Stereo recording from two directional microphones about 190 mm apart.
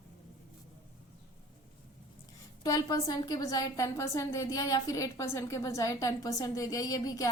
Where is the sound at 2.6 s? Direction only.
20° left (ahead or behind).